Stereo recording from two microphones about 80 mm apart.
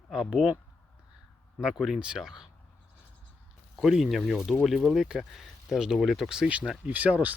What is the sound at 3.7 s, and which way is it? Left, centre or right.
Speech, centre.